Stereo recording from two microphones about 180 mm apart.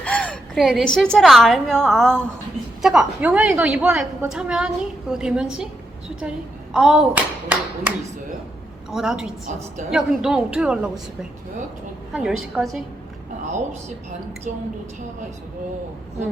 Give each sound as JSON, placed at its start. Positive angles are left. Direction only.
{"t": 0.0, "sound": "a woman's voice", "side_deg": 5}
{"t": 6.7, "sound": "a woman's voice", "side_deg": -5}